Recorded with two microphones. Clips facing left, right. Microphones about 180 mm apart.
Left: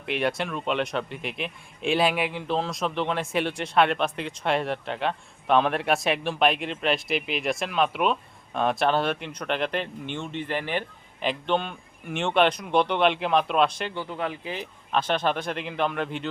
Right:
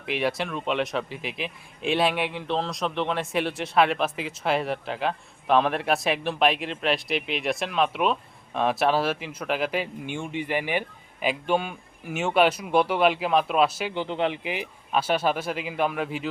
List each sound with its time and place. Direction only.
0.0 s a man's voice: centre (ahead or behind)
13.9 s speech: 20° right (ahead or behind)
14.5 s a man's voice: 10° right (ahead or behind)